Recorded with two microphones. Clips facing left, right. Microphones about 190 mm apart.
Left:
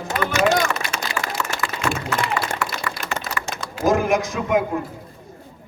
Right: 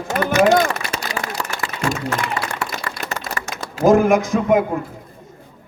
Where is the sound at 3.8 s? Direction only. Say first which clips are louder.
Right 5 dB; 55° right (ahead or behind).